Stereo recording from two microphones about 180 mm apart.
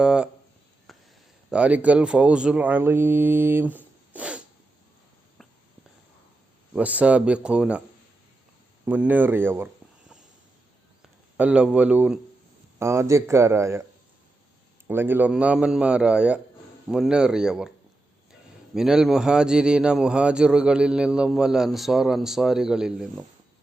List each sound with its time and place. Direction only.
0.0 s a man's voice: 5° right (ahead or behind)
0.9 s a sound: centre (ahead or behind)
1.5 s speech: 5° right (ahead or behind)
4.1 s sneeze: 5° right (ahead or behind)
6.7 s speech: 10° right (ahead or behind)
8.8 s speech: 10° right (ahead or behind)
11.3 s a man's voice: 5° right (ahead or behind)
14.8 s a man's voice: 10° right (ahead or behind)
18.7 s a man's voice: 5° right (ahead or behind)